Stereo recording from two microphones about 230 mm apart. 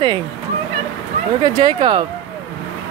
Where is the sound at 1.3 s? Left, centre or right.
Centre.